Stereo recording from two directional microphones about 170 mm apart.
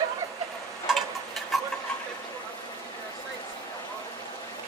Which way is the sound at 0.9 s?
Centre (ahead or behind).